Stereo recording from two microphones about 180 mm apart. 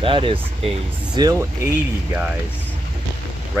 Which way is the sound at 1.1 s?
20° right (ahead or behind).